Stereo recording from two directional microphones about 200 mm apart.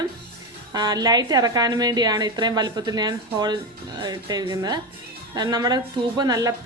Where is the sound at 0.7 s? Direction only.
20° right (ahead or behind).